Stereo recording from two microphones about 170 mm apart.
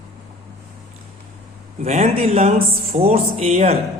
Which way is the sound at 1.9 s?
40° right (ahead or behind).